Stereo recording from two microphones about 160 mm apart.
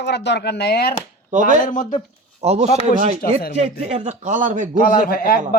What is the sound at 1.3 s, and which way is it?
Speech, 50° right (ahead or behind).